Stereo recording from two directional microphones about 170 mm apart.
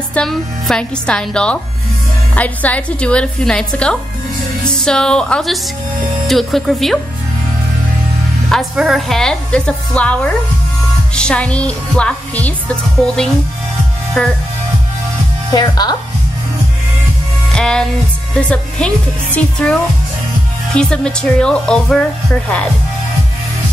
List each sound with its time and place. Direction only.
0.1 s speech: 5° left (ahead or behind)
8.5 s speech: centre (ahead or behind)
15.5 s speech: 25° left (ahead or behind)
17.5 s music: 5° left (ahead or behind)
18.5 s speech: 5° left (ahead or behind)